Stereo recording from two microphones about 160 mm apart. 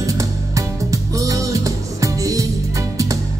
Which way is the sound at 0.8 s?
20° right (ahead or behind).